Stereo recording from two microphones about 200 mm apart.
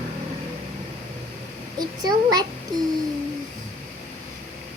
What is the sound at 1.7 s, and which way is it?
Speech, 20° right (ahead or behind).